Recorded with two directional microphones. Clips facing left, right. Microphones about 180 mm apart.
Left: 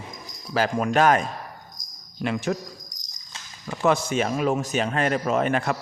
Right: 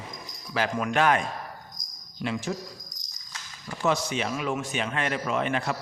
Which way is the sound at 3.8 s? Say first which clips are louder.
Left 5 dB; 50° left (ahead or behind).